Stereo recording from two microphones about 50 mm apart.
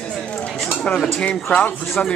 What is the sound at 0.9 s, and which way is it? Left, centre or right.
Speech, left.